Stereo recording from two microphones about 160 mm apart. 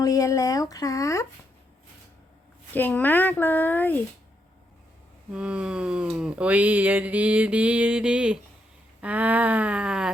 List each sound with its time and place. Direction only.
0.0 s speech: 20° left (ahead or behind)
2.7 s speech: 10° left (ahead or behind)
5.3 s a sound: 5° right (ahead or behind)